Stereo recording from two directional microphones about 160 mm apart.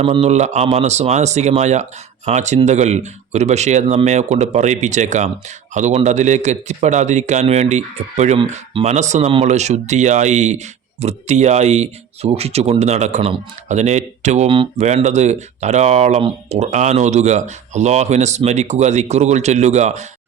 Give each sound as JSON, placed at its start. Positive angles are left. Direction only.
{"t": 0.0, "sound": "speech", "side_deg": -40}
{"t": 14.5, "sound": "speech", "side_deg": -35}
{"t": 14.8, "sound": "speech", "side_deg": -45}